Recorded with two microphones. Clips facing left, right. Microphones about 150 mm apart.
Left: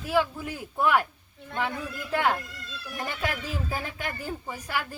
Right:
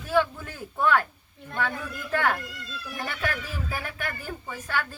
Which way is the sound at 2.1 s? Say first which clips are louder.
Even; 15° left (ahead or behind).